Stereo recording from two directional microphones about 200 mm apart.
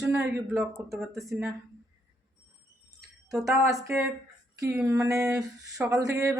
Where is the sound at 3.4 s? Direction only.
15° right (ahead or behind).